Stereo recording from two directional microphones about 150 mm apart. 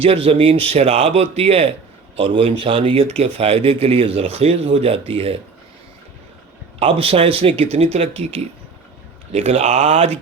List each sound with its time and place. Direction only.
0.0 s speech: 40° right (ahead or behind)
6.7 s speech: 40° right (ahead or behind)